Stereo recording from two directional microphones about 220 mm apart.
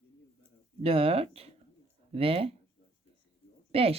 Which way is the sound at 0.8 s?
25° right (ahead or behind).